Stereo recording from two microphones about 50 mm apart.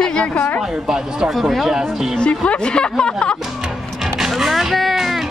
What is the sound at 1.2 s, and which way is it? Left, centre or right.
Speech, centre.